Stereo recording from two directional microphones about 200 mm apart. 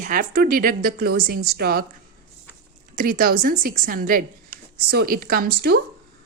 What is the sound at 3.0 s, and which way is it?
A woman's voice, 45° right (ahead or behind).